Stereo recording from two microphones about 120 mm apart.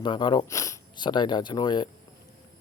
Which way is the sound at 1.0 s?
40° left (ahead or behind).